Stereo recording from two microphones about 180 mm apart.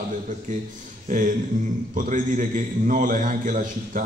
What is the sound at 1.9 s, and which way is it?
A man's voice, 45° right (ahead or behind).